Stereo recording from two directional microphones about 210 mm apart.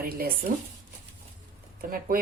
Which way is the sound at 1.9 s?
45° right (ahead or behind).